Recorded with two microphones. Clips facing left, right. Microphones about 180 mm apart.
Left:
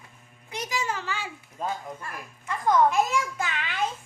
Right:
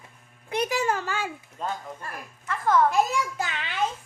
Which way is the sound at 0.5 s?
55° right (ahead or behind).